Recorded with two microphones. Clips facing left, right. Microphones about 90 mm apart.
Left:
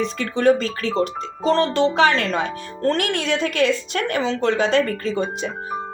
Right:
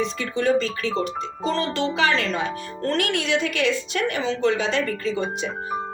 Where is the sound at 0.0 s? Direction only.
40° left (ahead or behind).